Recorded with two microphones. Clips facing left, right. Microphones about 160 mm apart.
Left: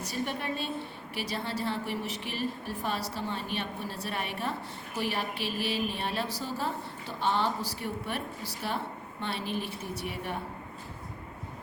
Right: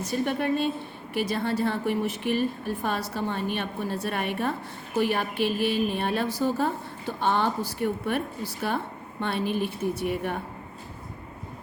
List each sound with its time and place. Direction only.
0.1 s a woman's voice: 50° right (ahead or behind)